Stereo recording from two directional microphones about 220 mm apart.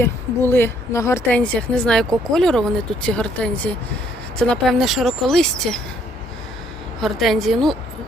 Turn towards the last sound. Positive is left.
turn(degrees=0)  # may be behind; listen again after turning